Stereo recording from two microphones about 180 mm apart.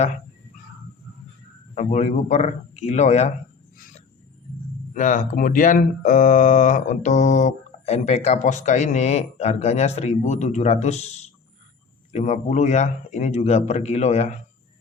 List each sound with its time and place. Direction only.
1.7 s speech: 40° left (ahead or behind)
4.9 s speech: 45° left (ahead or behind)